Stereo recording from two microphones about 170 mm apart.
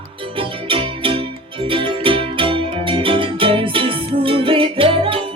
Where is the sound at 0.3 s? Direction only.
30° right (ahead or behind).